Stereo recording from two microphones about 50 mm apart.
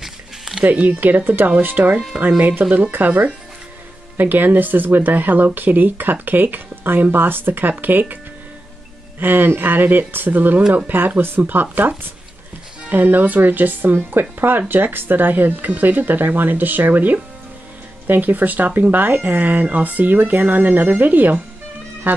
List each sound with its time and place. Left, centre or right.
0.0 s a sound: centre
0.7 s speech: right
9.2 s speech: right
12.9 s speech: right
22.0 s music: right